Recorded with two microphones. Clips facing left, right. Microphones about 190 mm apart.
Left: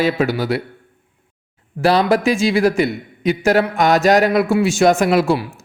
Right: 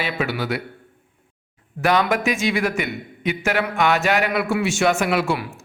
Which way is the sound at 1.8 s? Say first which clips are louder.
Left 5 dB; 35° left (ahead or behind).